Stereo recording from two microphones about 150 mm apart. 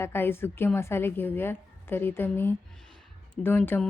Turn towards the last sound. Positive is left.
turn(degrees=10)  # may be behind; listen again after turning